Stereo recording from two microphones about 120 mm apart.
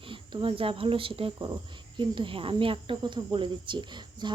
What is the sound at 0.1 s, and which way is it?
Speech, 45° right (ahead or behind).